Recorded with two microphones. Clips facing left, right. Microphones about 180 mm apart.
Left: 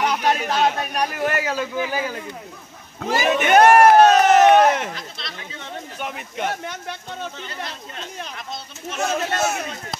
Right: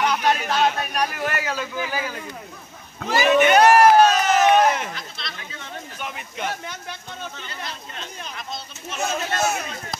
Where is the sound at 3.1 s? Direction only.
50° left (ahead or behind).